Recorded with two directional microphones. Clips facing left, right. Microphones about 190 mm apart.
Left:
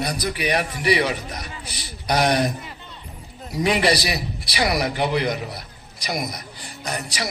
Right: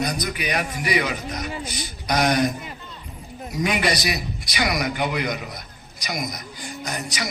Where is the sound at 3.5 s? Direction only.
30° left (ahead or behind).